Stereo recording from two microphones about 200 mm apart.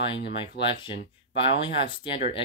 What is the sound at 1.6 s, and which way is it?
Speech, 25° left (ahead or behind).